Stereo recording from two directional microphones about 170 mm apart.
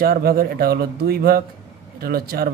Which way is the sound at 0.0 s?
65° right (ahead or behind).